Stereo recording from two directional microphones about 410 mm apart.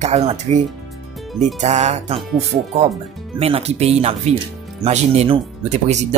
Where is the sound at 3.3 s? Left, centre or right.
Centre.